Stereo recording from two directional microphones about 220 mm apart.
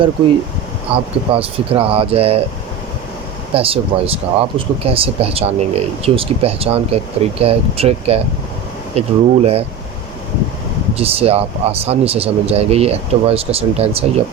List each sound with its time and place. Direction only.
0.9 s speech: 25° right (ahead or behind)
3.5 s speech: 25° right (ahead or behind)
10.9 s speech: 25° right (ahead or behind)